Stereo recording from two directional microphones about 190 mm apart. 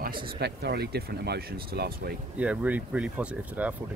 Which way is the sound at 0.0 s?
55° right (ahead or behind).